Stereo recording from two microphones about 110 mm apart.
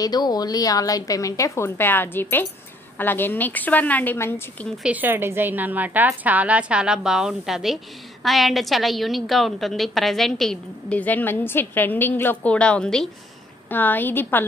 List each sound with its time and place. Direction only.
0.0 s a woman's voice: 35° left (ahead or behind); by 4.6 s 20° left (ahead or behind)
4.8 s a woman's voice: 15° right (ahead or behind); by 13.1 s 5° left (ahead or behind)
13.7 s a woman's voice: 15° left (ahead or behind)